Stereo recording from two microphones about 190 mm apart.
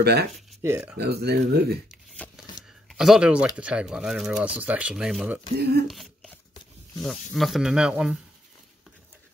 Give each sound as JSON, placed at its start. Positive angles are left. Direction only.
{"t": 0.0, "sound": "speech", "side_deg": -60}
{"t": 0.6, "sound": "speech", "side_deg": -10}
{"t": 0.9, "sound": "speech", "side_deg": -60}
{"t": 1.9, "sound": "shuffling cards", "side_deg": 5}
{"t": 2.9, "sound": "speech", "side_deg": 0}
{"t": 5.6, "sound": "speech", "side_deg": -55}
{"t": 5.9, "sound": "speech", "side_deg": 0}